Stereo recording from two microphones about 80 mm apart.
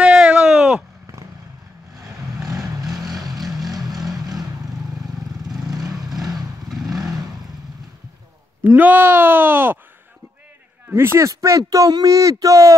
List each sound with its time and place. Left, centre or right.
0.0 s a sound: centre
1.0 s vehicle: right
2.0 s vehicle: centre
3.6 s vehicle: right
5.6 s vehicle: right
8.6 s speech: right
10.9 s speech: right